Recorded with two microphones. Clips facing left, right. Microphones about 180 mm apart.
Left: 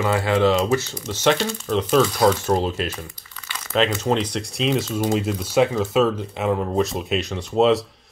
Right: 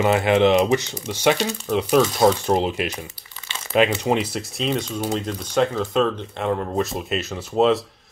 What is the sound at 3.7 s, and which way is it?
Speech, 10° right (ahead or behind).